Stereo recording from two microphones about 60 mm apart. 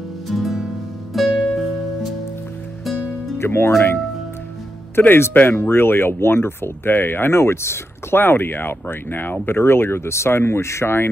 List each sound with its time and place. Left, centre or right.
0.3 s music: centre
3.3 s speech: left